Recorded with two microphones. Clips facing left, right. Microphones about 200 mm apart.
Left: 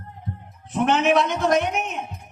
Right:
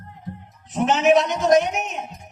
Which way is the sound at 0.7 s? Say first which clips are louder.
Right 2 dB; 55° left (ahead or behind).